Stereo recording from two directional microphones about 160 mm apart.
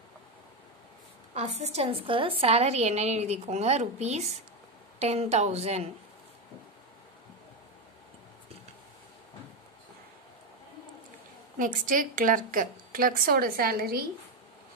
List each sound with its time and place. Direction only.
1.3 s a woman's voice: 45° right (ahead or behind)
11.5 s a woman's voice: 55° right (ahead or behind)